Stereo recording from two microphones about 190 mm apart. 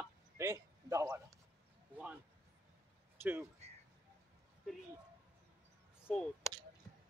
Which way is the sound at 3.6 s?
35° right (ahead or behind).